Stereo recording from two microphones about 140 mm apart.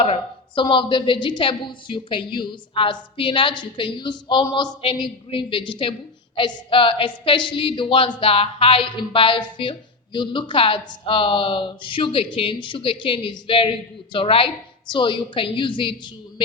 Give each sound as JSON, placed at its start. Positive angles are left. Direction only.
{"t": 0.0, "sound": "speech", "side_deg": 40}